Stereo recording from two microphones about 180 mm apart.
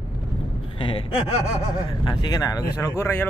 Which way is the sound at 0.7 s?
30° left (ahead or behind).